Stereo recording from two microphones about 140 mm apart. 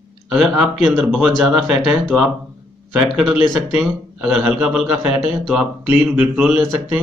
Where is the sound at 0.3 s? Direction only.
Centre (ahead or behind).